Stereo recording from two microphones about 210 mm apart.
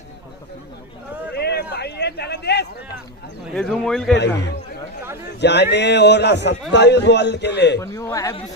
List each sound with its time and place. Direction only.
1.3 s a sound: 50° left (ahead or behind)
3.5 s speech: centre (ahead or behind)
4.1 s a man's voice: 55° left (ahead or behind)
7.8 s a man's voice: 15° left (ahead or behind)